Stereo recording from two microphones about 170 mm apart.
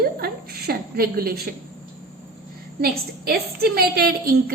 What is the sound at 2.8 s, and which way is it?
A woman's voice, 65° right (ahead or behind).